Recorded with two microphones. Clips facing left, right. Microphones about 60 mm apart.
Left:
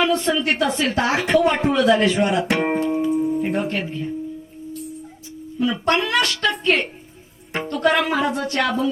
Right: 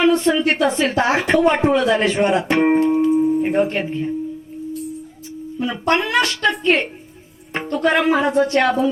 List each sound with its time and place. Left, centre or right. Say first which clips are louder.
0.0 s speech: right 4 dB; right
2.7 s music: right 5 dB; right
3.4 s speech: right 4 dB; right
5.5 s speech: right 1 dB; right